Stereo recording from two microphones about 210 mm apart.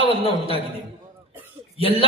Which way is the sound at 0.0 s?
25° left (ahead or behind).